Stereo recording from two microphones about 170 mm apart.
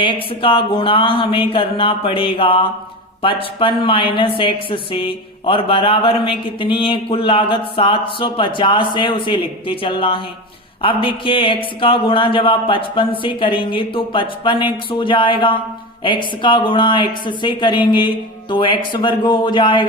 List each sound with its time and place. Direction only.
0.0 s speech: 30° left (ahead or behind)